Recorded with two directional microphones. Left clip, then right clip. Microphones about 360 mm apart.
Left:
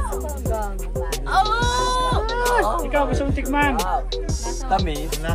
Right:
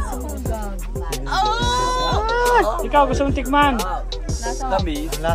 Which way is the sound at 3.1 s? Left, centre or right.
Centre.